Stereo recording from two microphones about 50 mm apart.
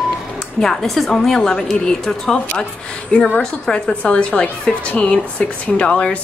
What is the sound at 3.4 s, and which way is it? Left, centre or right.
A woman's voice, centre.